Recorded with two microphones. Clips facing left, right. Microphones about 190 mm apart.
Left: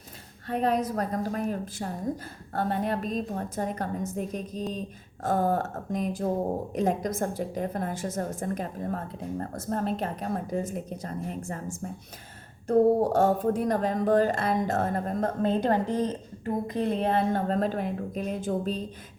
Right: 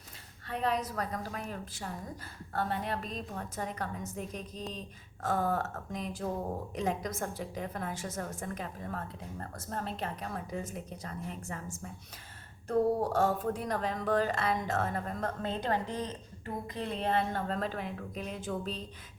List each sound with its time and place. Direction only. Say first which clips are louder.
0.4 s speech: left 6 dB; 45° left (ahead or behind)
12.6 s speech: left 7 dB; 45° left (ahead or behind)